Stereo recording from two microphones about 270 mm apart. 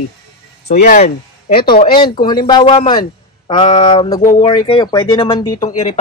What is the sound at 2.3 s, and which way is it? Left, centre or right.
Speech, centre.